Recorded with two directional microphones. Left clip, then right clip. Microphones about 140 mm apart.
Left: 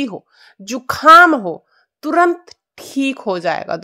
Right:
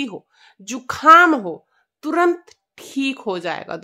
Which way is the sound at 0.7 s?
35° left (ahead or behind).